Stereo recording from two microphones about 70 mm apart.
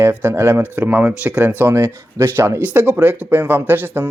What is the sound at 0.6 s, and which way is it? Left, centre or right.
Speech, right.